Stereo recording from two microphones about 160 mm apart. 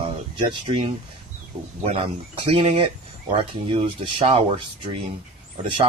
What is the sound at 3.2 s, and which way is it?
Speech, 35° right (ahead or behind).